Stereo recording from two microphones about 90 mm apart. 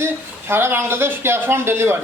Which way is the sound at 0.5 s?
25° right (ahead or behind).